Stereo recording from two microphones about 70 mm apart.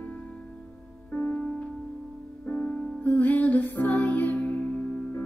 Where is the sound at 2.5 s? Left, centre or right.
Left.